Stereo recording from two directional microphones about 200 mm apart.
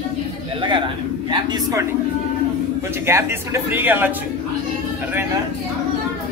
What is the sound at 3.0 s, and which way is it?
Speech, 15° right (ahead or behind).